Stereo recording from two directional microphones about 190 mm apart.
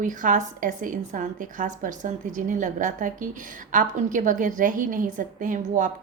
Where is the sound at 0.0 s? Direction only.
40° right (ahead or behind).